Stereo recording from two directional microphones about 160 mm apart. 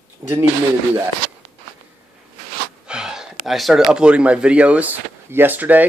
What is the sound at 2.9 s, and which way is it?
Speech, 5° right (ahead or behind).